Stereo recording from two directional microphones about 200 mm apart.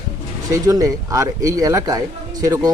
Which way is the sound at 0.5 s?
15° right (ahead or behind).